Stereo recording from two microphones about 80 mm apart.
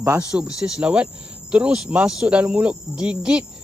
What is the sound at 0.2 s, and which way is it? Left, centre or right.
Speech, centre.